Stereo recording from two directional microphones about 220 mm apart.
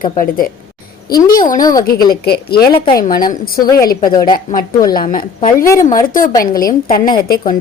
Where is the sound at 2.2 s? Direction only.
45° left (ahead or behind).